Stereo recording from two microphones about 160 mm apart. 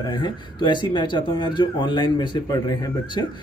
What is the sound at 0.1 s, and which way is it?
Speech, 30° left (ahead or behind).